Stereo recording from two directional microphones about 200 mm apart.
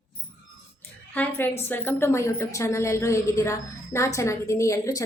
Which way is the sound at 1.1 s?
10° left (ahead or behind).